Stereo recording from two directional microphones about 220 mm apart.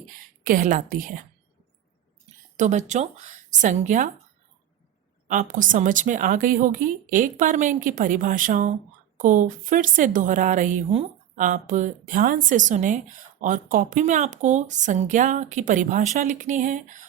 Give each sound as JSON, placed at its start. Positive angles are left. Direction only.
{"t": 0.4, "sound": "a woman's voice", "side_deg": -35}
{"t": 2.6, "sound": "a woman's voice", "side_deg": -30}
{"t": 5.3, "sound": "a woman's voice", "side_deg": -35}